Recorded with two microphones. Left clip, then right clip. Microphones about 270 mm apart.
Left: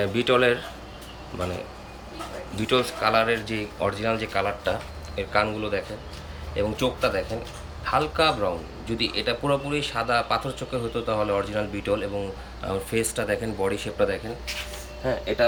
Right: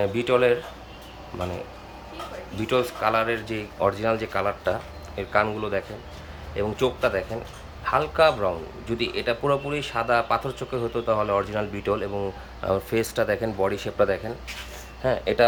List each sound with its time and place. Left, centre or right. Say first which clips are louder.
0.0 s speech: even; centre
2.6 s speech: even; centre